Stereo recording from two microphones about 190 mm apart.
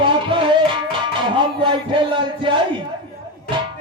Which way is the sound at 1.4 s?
25° right (ahead or behind).